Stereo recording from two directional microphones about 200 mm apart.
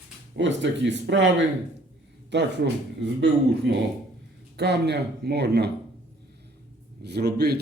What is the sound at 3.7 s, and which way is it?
Speech, 60° right (ahead or behind).